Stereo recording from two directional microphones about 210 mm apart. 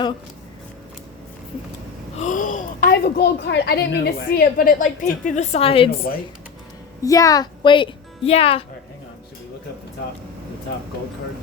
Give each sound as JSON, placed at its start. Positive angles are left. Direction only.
{"t": 2.1, "sound": "a child's voice", "side_deg": 35}
{"t": 7.0, "sound": "a woman's voice", "side_deg": 15}